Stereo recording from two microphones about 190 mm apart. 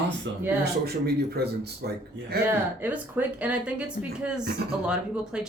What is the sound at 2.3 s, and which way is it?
Speech, 55° right (ahead or behind).